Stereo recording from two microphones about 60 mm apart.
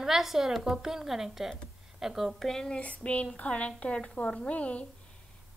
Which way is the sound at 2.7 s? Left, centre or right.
Left.